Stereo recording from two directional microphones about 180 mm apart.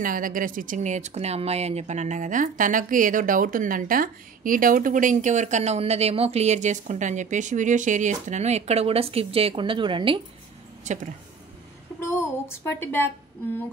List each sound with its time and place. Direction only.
0.0 s speech: 50° right (ahead or behind); by 10.2 s 30° right (ahead or behind)
10.8 s speech: 40° right (ahead or behind)
12.0 s speech: 15° left (ahead or behind)